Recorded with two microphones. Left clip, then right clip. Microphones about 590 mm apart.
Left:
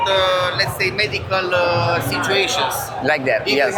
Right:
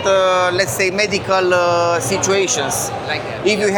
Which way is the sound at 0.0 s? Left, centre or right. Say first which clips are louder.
Right 3 dB; right.